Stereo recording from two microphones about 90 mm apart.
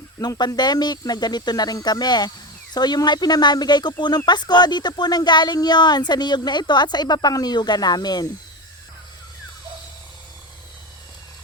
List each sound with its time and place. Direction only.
0.2 s speech: 50° left (ahead or behind)